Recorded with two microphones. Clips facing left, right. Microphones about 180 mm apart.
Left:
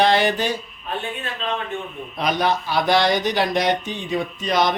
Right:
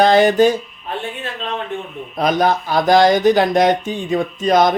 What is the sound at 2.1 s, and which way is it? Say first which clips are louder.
Speech: right 5 dB; 45° right (ahead or behind).